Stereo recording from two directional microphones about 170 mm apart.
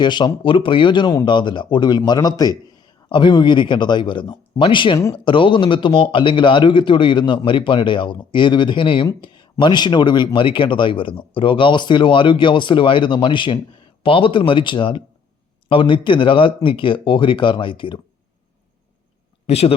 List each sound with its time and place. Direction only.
0.0 s speech: 25° left (ahead or behind)
19.5 s speech: 35° left (ahead or behind)